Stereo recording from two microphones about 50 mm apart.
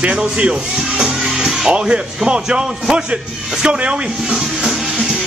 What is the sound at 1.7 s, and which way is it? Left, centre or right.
Speech, centre.